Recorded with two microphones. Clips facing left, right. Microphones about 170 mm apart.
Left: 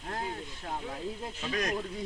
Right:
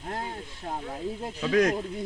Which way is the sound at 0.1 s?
30° right (ahead or behind).